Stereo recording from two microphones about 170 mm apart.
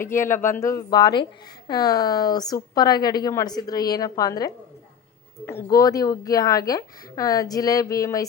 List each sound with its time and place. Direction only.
0.0 s speech: 15° left (ahead or behind)